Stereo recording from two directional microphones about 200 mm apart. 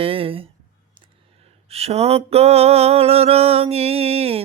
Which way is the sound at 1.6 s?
30° right (ahead or behind).